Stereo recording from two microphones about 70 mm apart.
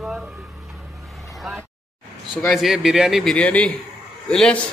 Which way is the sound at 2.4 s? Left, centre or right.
Centre.